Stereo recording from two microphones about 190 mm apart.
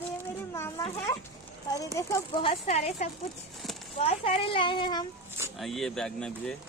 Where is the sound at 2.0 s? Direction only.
15° left (ahead or behind).